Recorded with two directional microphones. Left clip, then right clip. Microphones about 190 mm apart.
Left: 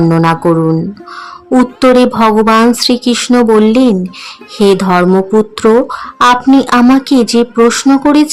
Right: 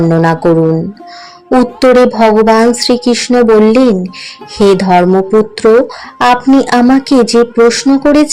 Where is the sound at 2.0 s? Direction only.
20° left (ahead or behind).